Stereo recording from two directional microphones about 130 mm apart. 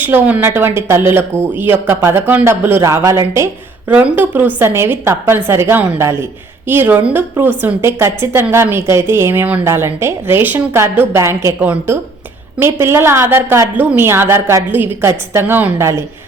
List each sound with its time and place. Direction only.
0.0 s speech: 15° right (ahead or behind)